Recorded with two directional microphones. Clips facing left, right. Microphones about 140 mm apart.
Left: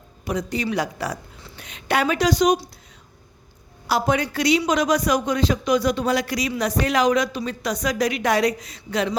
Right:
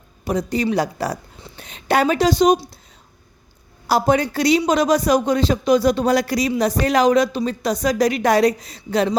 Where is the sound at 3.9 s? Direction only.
35° right (ahead or behind).